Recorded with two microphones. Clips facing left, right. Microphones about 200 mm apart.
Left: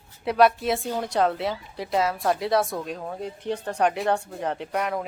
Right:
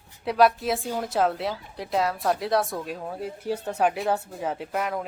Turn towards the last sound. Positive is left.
turn(degrees=0)  # may be behind; listen again after turning